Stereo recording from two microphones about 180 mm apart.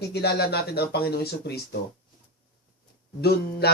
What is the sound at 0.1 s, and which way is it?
Speech, 65° left (ahead or behind).